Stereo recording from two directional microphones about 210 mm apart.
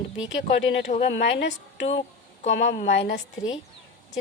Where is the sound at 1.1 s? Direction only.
60° left (ahead or behind).